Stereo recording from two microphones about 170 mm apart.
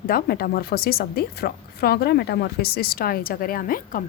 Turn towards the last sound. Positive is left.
turn(degrees=55)  # may be behind; listen again after turning